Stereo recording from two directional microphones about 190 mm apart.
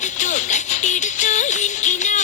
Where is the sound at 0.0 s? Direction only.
40° left (ahead or behind).